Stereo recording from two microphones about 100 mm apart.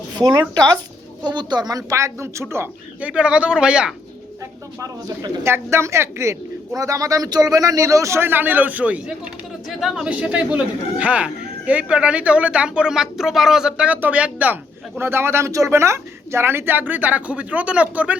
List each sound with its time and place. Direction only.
0.2 s speech: 40° right (ahead or behind); by 2.6 s 25° right (ahead or behind)
3.0 s speech: 10° right (ahead or behind)
4.8 s speech: 40° right (ahead or behind)
5.4 s a man's voice: 25° right (ahead or behind)